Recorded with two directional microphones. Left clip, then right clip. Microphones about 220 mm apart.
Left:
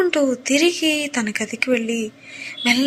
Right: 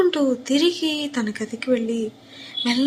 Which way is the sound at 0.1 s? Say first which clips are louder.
Left 3 dB; 15° left (ahead or behind).